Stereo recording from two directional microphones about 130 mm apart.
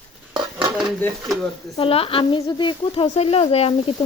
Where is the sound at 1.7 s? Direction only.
50° left (ahead or behind).